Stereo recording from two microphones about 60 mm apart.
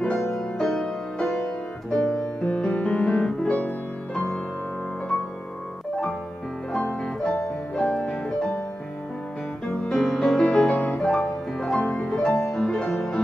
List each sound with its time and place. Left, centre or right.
0.3 s music: centre
6.8 s music: centre
9.7 s music: centre